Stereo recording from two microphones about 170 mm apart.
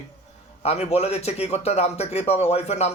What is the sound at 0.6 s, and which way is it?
Speech, 35° left (ahead or behind).